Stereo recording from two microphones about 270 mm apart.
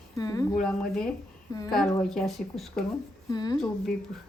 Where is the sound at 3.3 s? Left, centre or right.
Centre.